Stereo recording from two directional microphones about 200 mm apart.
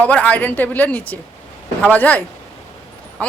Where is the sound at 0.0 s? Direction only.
5° left (ahead or behind).